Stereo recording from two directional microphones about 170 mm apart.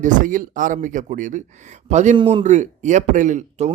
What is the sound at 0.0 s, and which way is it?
Speech, 50° right (ahead or behind).